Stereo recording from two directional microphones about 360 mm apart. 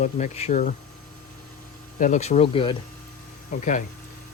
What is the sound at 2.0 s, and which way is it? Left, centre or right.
Speech, centre.